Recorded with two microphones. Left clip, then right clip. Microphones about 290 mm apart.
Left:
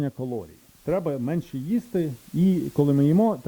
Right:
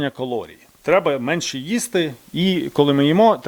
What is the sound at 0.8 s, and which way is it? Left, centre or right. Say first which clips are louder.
Speech: right 9 dB; centre.